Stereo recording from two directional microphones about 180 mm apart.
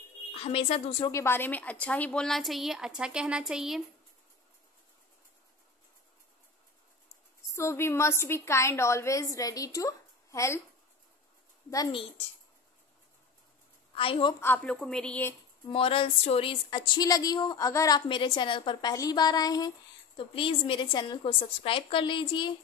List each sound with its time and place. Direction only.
0.3 s speech: 30° left (ahead or behind)
1.1 s a woman's voice: 15° left (ahead or behind); by 3.8 s centre (ahead or behind)
7.5 s a woman's voice: 15° left (ahead or behind)
11.7 s a woman's voice: 25° left (ahead or behind)
13.9 s a woman's voice: 30° left (ahead or behind)
14.4 s a woman's voice: 10° left (ahead or behind)
15.7 s a woman's voice: 30° left (ahead or behind)